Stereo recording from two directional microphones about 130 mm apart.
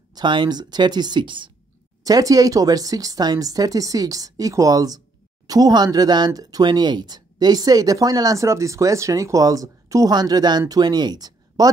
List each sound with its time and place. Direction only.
0.1 s speech: 35° right (ahead or behind)